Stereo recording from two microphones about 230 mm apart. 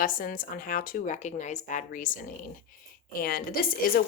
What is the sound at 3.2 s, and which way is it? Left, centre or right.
Speech, left.